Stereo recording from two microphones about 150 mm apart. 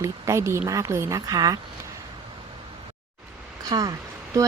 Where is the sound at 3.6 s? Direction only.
25° right (ahead or behind).